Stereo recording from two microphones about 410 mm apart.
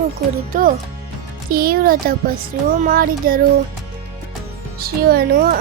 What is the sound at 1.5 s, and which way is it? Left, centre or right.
Speech, right.